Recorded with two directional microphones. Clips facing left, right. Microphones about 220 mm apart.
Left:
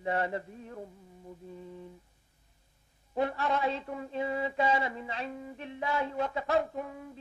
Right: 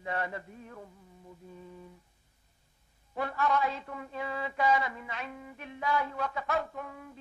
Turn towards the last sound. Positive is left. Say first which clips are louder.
# left 4 dB
turn(degrees=25)  # may be behind; listen again after turning